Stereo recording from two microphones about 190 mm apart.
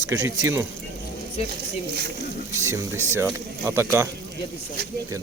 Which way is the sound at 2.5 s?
15° right (ahead or behind).